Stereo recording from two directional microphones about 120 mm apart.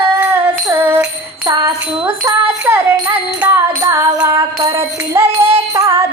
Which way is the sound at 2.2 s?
20° right (ahead or behind).